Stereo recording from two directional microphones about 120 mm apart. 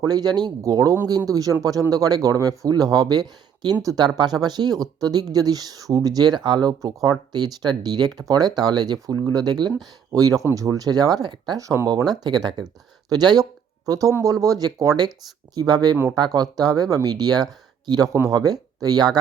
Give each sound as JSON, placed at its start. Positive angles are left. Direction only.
{"t": 0.0, "sound": "speech", "side_deg": -35}